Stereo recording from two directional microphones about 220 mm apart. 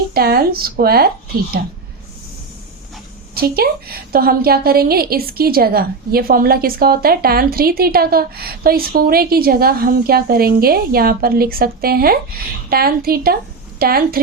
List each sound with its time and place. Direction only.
0.1 s a woman's voice: 45° right (ahead or behind)
3.3 s a woman's voice: 45° right (ahead or behind)